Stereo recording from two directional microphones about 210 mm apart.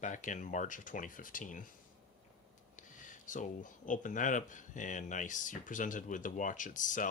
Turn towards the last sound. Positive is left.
turn(degrees=35)  # may be behind; listen again after turning